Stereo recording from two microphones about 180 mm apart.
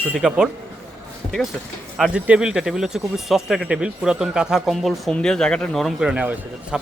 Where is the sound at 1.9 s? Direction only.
5° right (ahead or behind).